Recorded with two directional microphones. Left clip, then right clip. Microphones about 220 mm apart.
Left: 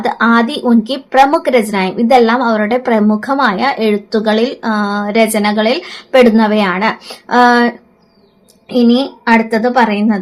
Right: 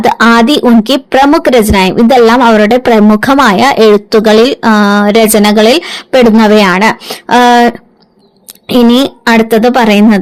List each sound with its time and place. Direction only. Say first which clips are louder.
0.0 s a woman's voice: right 6 dB; 40° right (ahead or behind)
9.2 s a woman's voice: right 4 dB; 45° right (ahead or behind)